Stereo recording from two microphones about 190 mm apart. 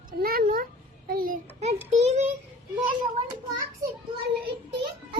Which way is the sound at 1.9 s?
35° right (ahead or behind).